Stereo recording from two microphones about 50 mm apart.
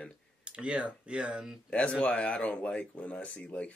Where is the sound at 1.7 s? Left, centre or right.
Left.